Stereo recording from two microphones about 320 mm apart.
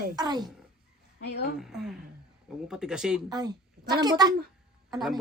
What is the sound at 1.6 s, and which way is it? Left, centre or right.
A woman's voice, centre.